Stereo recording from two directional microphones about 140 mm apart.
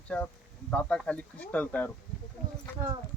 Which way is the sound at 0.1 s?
10° left (ahead or behind).